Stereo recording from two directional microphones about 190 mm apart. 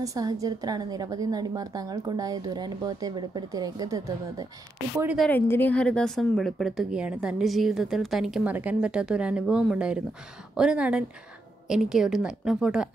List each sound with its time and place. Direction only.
0.0 s a woman's voice: 20° right (ahead or behind)
4.9 s a woman's voice: 5° right (ahead or behind)
5.3 s a woman's voice: 10° left (ahead or behind)